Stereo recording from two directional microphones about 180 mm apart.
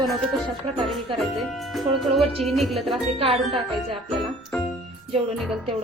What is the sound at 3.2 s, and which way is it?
Speech, 30° right (ahead or behind).